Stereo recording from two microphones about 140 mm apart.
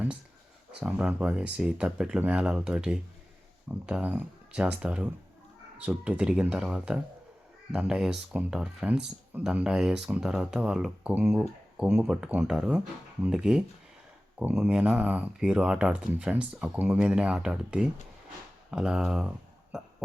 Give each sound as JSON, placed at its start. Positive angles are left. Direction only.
{"t": 0.8, "sound": "speech", "side_deg": -10}